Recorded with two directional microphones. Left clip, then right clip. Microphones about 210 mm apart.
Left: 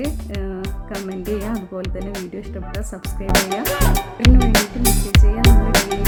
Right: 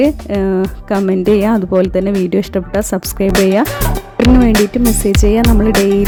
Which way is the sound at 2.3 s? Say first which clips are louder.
Right 16 dB; 50° right (ahead or behind).